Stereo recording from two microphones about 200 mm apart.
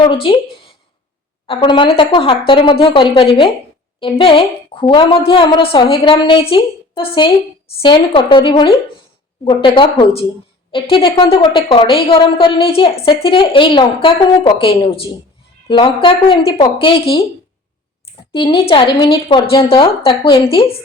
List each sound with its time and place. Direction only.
0.1 s a woman's voice: 25° left (ahead or behind)
1.5 s a woman's voice: 25° left (ahead or behind)
18.3 s a woman's voice: 25° left (ahead or behind)